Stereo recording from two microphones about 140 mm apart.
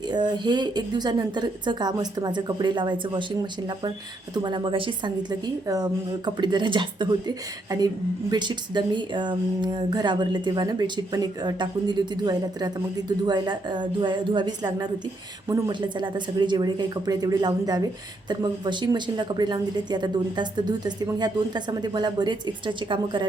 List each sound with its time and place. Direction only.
0.1 s a woman's voice: 30° right (ahead or behind)